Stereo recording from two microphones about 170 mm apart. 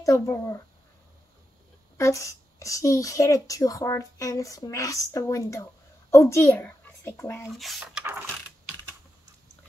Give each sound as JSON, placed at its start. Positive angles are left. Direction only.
{"t": 0.0, "sound": "a woman's voice", "side_deg": 20}
{"t": 2.0, "sound": "a woman's voice", "side_deg": 15}
{"t": 7.4, "sound": "speech", "side_deg": 0}